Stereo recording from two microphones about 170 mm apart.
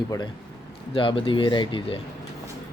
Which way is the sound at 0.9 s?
30° left (ahead or behind).